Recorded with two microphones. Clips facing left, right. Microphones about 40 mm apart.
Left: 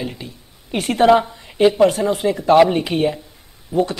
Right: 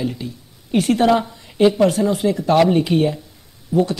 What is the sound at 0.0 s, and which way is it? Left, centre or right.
A woman's voice, centre.